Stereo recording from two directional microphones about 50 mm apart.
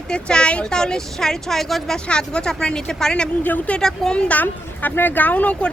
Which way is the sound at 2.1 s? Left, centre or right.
Centre.